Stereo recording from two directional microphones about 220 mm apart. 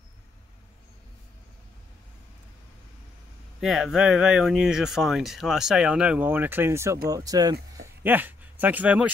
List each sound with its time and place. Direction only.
3.6 s speech: centre (ahead or behind)